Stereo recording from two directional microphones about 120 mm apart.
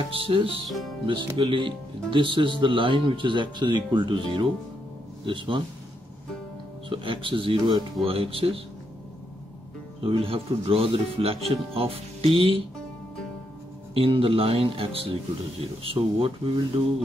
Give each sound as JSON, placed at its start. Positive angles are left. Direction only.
{"t": 0.1, "sound": "speech", "side_deg": -50}
{"t": 0.7, "sound": "speech", "side_deg": 0}
{"t": 1.0, "sound": "speech", "side_deg": -45}
{"t": 6.9, "sound": "speech", "side_deg": -45}
{"t": 10.0, "sound": "speech", "side_deg": -50}
{"t": 13.9, "sound": "speech", "side_deg": -50}